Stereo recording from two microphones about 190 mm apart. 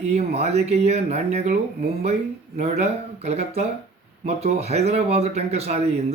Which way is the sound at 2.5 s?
35° right (ahead or behind).